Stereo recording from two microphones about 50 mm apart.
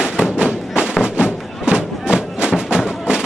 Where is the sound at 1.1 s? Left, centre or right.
Centre.